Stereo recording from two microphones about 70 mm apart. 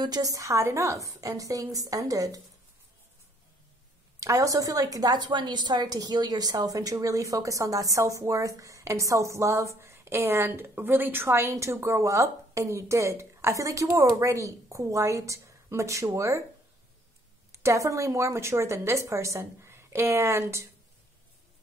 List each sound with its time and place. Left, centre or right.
0.0 s a woman's voice: right
0.3 s a woman's voice: right
4.2 s a woman's voice: right
11.8 s a woman's voice: right
17.5 s a woman's voice: right